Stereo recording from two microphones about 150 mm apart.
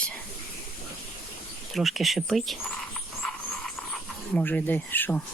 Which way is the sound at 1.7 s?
Centre (ahead or behind).